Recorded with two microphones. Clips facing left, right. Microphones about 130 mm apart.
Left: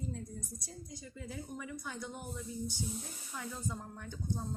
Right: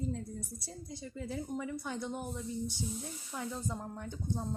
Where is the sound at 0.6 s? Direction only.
25° right (ahead or behind).